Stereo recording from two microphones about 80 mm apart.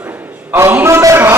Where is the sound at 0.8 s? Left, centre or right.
Right.